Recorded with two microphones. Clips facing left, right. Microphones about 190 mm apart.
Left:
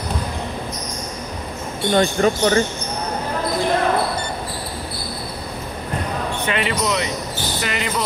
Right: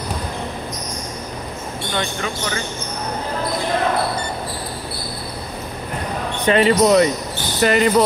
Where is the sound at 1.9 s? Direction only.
40° left (ahead or behind).